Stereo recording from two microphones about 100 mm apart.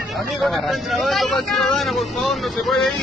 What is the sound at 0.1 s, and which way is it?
Speech, centre (ahead or behind).